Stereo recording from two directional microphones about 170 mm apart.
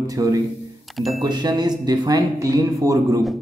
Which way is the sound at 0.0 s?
20° right (ahead or behind).